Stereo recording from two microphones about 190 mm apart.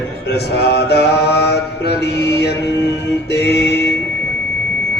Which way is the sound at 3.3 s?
60° left (ahead or behind).